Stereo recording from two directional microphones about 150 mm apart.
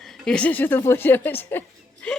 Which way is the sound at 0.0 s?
5° left (ahead or behind).